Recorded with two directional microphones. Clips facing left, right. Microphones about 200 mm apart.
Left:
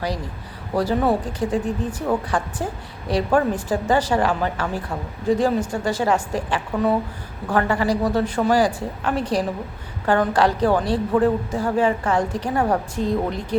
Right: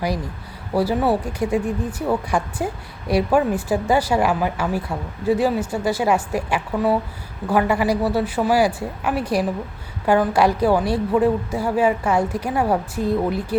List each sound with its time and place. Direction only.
0.7 s speech: 10° right (ahead or behind)